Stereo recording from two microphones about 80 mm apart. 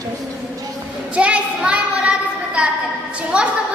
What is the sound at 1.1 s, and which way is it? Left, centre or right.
A child's voice, centre.